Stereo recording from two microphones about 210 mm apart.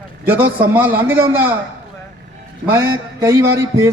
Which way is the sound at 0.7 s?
10° right (ahead or behind).